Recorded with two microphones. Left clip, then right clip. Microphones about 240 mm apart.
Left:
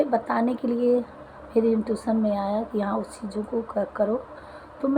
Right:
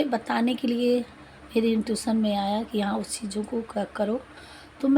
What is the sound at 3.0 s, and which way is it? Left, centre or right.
Speech, right.